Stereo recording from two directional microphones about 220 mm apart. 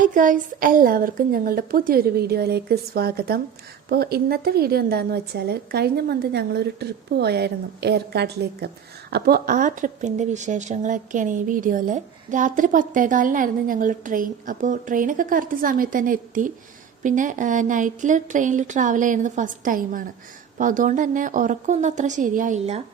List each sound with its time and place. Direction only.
0.0 s speech: 35° right (ahead or behind)